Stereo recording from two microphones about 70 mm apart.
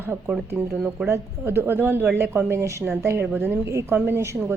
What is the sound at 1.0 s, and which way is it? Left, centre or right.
A woman's voice, right.